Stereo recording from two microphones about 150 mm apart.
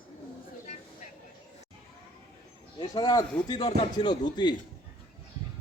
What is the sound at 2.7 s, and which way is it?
Speech, 30° left (ahead or behind).